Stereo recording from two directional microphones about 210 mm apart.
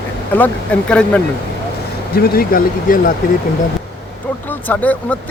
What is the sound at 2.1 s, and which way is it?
Speech, 45° left (ahead or behind).